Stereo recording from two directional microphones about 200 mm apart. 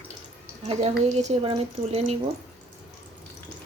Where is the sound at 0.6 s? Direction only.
35° right (ahead or behind).